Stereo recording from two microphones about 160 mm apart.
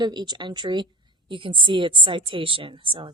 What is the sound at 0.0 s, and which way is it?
A woman's voice, 25° right (ahead or behind).